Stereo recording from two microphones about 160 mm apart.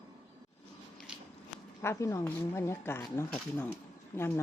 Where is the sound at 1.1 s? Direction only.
5° right (ahead or behind).